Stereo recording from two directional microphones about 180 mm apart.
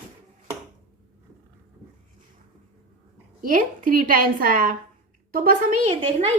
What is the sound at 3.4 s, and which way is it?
A woman's voice, 50° right (ahead or behind).